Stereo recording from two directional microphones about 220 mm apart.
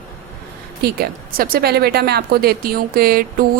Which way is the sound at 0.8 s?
45° right (ahead or behind).